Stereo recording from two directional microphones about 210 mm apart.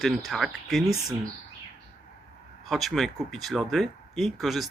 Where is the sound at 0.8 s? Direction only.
15° right (ahead or behind).